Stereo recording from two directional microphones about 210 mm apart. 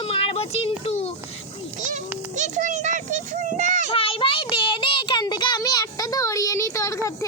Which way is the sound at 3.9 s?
25° left (ahead or behind).